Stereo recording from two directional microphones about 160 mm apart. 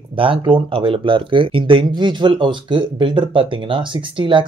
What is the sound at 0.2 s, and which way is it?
Speech, 35° right (ahead or behind).